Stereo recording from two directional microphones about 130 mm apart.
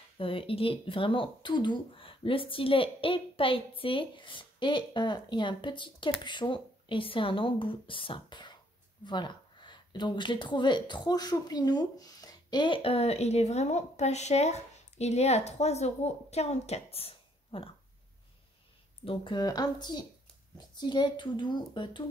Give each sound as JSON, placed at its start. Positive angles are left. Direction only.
{"t": 0.2, "sound": "speech", "side_deg": 45}
{"t": 19.0, "sound": "speech", "side_deg": 35}